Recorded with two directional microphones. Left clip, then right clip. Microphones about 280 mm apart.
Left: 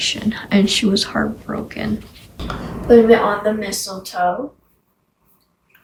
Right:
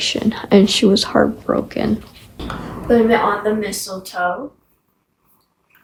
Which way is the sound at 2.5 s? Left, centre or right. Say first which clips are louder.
Left 4 dB; centre.